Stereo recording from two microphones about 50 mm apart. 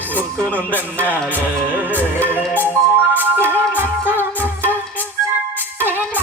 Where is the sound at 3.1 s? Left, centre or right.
Right.